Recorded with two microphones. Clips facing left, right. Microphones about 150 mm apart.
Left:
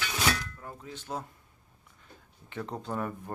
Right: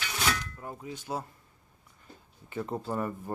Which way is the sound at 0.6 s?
15° right (ahead or behind).